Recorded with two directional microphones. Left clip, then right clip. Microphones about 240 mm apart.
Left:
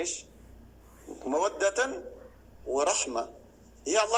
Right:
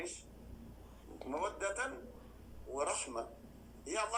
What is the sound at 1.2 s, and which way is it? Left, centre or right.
A man's voice, left.